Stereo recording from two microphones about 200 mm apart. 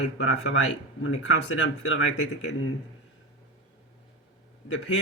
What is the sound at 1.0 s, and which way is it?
Speech, 80° left.